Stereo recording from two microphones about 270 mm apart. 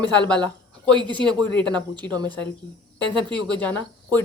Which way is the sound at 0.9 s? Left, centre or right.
Centre.